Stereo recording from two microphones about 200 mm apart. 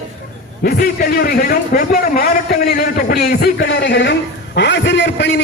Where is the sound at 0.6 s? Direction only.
50° left (ahead or behind).